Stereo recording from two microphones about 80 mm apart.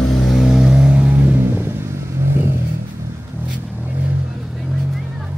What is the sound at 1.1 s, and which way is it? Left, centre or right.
Vehicle, right.